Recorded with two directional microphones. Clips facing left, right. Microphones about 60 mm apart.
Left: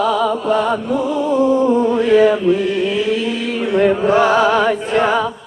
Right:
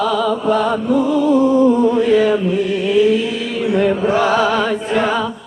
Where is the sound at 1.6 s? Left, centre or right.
Left.